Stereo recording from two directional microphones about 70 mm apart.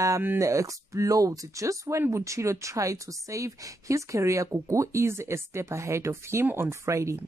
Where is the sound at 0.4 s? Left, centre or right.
Right.